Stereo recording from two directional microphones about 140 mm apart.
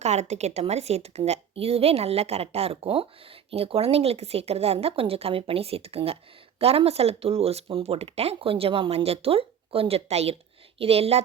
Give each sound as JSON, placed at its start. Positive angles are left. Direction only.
{"t": 0.0, "sound": "a woman's voice", "side_deg": -50}